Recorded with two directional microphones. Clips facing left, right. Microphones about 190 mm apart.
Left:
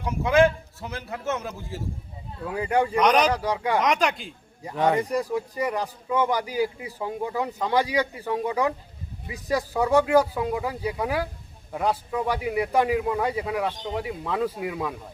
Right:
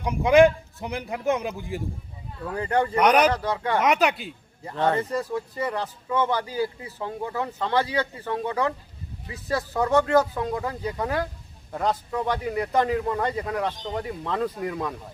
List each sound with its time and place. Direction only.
0.0 s a man's voice: 15° right (ahead or behind)
2.4 s a man's voice: 10° left (ahead or behind)
3.0 s a man's voice: 10° right (ahead or behind)
3.2 s a man's voice: 10° left (ahead or behind)
3.8 s speech: 5° right (ahead or behind)
4.6 s a man's voice: 10° left (ahead or behind)